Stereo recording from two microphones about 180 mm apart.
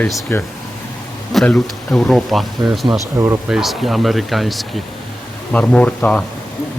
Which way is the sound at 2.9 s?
15° right (ahead or behind).